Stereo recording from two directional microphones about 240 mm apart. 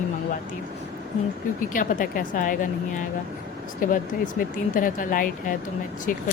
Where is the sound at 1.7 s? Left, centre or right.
Left.